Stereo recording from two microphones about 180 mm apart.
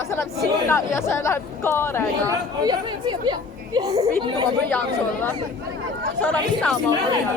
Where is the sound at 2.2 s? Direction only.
20° right (ahead or behind).